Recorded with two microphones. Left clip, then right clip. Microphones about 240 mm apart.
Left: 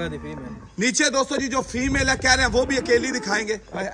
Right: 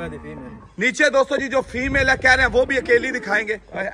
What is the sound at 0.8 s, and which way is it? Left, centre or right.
Speech, centre.